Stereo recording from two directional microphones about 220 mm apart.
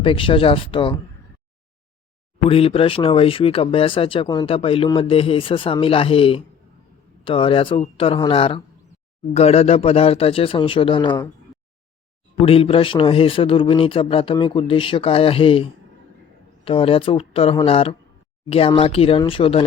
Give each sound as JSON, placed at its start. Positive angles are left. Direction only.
{"t": 0.0, "sound": "speech", "side_deg": 25}
{"t": 2.5, "sound": "speech", "side_deg": 25}
{"t": 12.4, "sound": "speech", "side_deg": 25}